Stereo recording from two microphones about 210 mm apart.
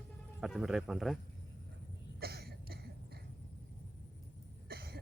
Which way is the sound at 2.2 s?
50° right (ahead or behind).